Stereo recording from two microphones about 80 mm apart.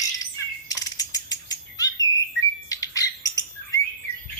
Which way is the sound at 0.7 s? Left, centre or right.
Left.